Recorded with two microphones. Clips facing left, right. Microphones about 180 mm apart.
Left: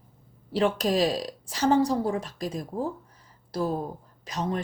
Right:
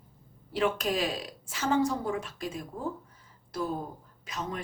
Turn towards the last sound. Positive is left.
turn(degrees=35)  # may be behind; listen again after turning